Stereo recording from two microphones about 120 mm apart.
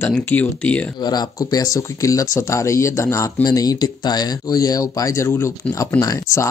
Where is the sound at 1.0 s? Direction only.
35° left (ahead or behind).